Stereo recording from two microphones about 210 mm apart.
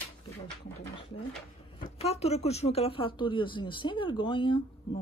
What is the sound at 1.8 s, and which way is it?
Speech, 30° left (ahead or behind).